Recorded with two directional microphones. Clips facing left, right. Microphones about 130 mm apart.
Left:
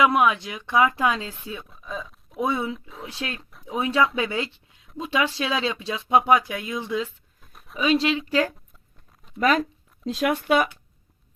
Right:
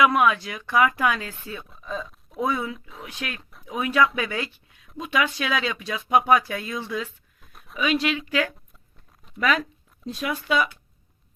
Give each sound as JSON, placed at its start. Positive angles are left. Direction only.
{"t": 0.0, "sound": "speech", "side_deg": 20}
{"t": 1.6, "sound": "a sound", "side_deg": 0}
{"t": 2.4, "sound": "speech", "side_deg": 25}
{"t": 7.4, "sound": "a sound", "side_deg": 0}
{"t": 7.8, "sound": "speech", "side_deg": 30}
{"t": 10.1, "sound": "speech", "side_deg": 75}